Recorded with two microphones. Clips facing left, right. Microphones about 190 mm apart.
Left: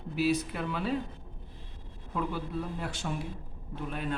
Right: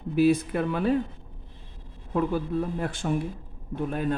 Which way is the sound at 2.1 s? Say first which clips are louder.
Right 8 dB; 50° right (ahead or behind).